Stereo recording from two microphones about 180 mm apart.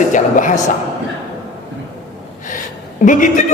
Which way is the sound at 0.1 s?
45° left (ahead or behind).